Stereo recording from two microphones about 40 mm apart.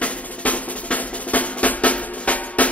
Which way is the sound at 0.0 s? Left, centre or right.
Left.